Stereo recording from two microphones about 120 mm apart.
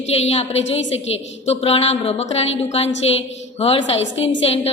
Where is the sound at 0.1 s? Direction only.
60° left (ahead or behind).